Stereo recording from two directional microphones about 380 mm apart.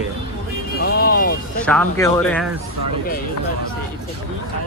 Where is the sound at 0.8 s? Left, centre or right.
Left.